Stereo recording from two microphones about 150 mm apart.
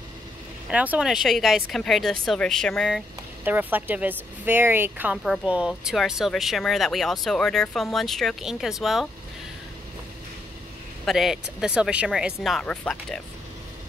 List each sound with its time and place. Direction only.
0.7 s speech: 5° right (ahead or behind)
3.4 s speech: 10° right (ahead or behind)
11.1 s speech: centre (ahead or behind)